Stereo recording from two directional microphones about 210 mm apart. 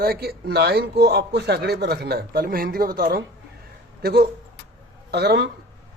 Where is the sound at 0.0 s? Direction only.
45° right (ahead or behind).